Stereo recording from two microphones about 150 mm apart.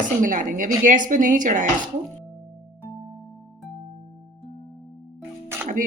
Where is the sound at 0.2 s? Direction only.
60° right (ahead or behind).